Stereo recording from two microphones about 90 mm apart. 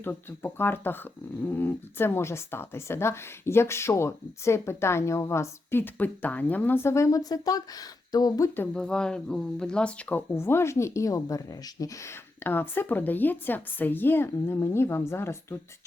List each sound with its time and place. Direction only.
0.0 s speech: 25° left (ahead or behind); by 8.4 s 45° left (ahead or behind)
8.5 s speech: 15° left (ahead or behind); by 15.5 s 30° left (ahead or behind)